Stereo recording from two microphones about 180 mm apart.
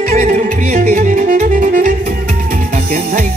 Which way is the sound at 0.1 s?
50° right (ahead or behind).